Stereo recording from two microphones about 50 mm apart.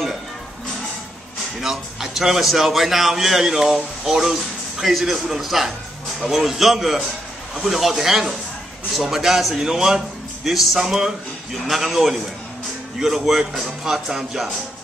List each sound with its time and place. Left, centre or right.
1.6 s a man's voice: centre